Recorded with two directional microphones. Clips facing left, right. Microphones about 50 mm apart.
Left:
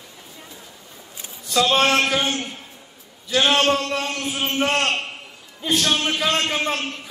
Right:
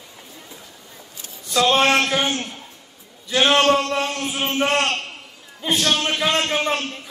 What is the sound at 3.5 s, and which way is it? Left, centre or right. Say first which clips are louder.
A man's voice: right 3 dB; centre.